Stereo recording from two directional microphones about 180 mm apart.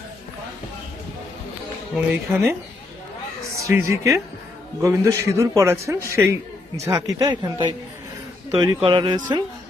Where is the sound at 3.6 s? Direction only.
15° right (ahead or behind).